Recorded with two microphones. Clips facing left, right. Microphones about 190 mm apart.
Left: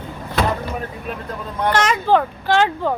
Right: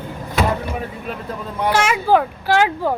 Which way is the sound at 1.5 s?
10° right (ahead or behind).